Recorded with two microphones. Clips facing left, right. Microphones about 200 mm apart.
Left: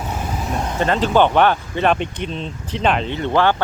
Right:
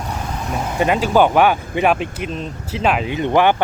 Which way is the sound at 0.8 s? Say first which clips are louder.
Right 1 dB; 10° right (ahead or behind).